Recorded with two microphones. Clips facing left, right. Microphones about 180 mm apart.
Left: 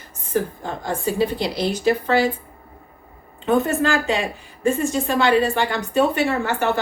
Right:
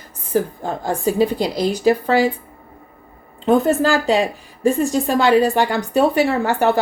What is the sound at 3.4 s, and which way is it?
A woman's voice, 35° right (ahead or behind).